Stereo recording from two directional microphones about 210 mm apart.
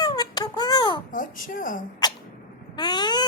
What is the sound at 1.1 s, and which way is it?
Speech, 40° left (ahead or behind).